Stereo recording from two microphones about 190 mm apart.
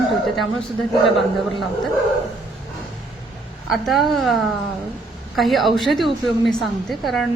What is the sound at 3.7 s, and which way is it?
A woman's voice, centre (ahead or behind).